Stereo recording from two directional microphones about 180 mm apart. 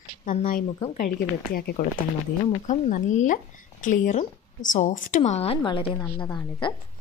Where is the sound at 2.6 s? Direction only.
40° left (ahead or behind); by 6.7 s 25° left (ahead or behind).